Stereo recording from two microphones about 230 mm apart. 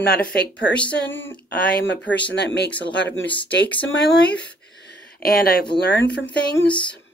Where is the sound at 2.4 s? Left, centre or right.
Left.